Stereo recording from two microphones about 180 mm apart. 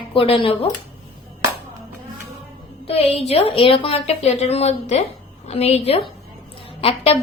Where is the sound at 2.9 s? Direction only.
35° left (ahead or behind).